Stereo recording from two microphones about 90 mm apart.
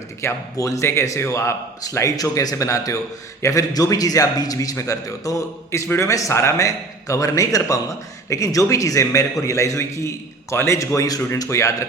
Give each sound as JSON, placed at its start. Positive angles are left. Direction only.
{"t": 0.2, "sound": "a man's voice", "side_deg": 35}